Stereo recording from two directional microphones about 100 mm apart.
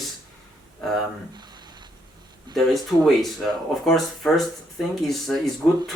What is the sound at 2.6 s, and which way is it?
Speech, centre (ahead or behind).